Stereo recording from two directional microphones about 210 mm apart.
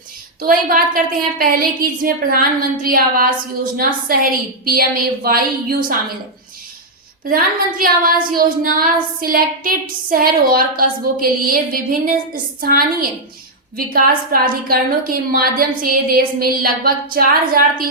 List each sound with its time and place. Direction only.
0.4 s a woman's voice: 40° right (ahead or behind)
7.3 s a woman's voice: 45° right (ahead or behind)